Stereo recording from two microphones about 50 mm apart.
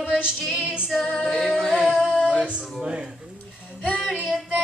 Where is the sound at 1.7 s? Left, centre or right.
Right.